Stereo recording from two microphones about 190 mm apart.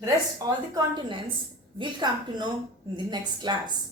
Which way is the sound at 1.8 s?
25° right (ahead or behind).